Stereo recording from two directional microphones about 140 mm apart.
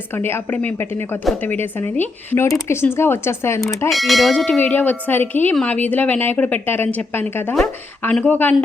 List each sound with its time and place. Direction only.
0.1 s a woman's voice: 15° left (ahead or behind)
3.8 s a woman's voice: centre (ahead or behind)
7.5 s a woman's voice: 5° left (ahead or behind)